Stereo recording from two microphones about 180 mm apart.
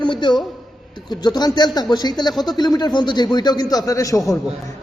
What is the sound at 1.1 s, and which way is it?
A man's voice, 25° left (ahead or behind).